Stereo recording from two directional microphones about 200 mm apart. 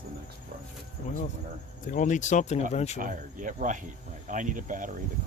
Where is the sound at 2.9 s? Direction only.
40° right (ahead or behind).